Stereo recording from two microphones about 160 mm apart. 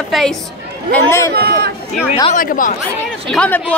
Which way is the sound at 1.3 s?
80° right.